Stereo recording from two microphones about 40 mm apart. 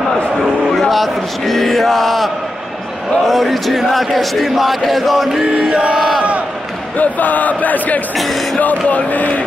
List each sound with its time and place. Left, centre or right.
0.4 s a sound: centre
3.3 s speech: centre
7.0 s speech: left